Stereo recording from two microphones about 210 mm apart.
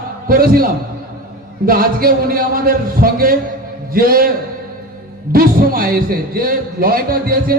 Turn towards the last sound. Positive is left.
turn(degrees=-45)  # may be behind; listen again after turning